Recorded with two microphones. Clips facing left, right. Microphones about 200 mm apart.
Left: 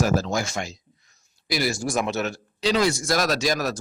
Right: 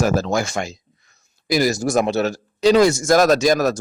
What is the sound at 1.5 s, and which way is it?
Speech, 40° right (ahead or behind).